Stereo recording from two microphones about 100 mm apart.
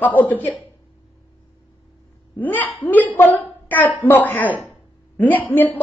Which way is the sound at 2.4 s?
15° left (ahead or behind).